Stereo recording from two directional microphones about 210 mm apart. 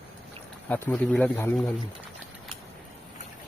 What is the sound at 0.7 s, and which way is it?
Speech, 5° left (ahead or behind).